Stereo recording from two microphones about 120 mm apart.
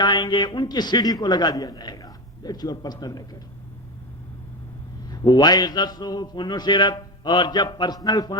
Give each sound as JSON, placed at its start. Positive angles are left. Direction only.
{"t": 0.0, "sound": "a man's voice", "side_deg": 40}
{"t": 5.1, "sound": "a man's voice", "side_deg": 35}